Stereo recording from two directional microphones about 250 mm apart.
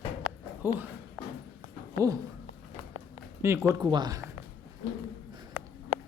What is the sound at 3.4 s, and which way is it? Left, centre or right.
Speech, centre.